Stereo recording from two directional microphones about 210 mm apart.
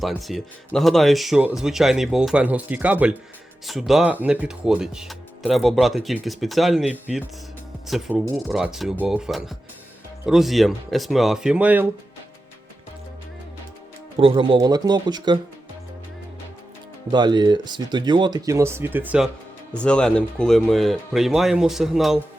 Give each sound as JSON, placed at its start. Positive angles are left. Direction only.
{"t": 0.0, "sound": "speech", "side_deg": 0}
{"t": 14.2, "sound": "speech", "side_deg": -25}
{"t": 17.1, "sound": "speech", "side_deg": -20}
{"t": 19.8, "sound": "speech", "side_deg": 5}